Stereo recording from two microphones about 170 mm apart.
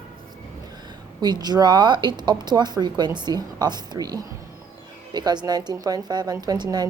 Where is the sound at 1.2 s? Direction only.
25° right (ahead or behind).